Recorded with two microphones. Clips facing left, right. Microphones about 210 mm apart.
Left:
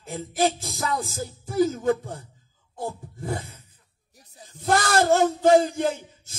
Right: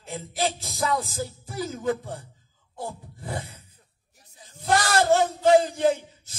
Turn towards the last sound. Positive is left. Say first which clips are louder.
# right 5 dB
turn(degrees=50)  # may be behind; listen again after turning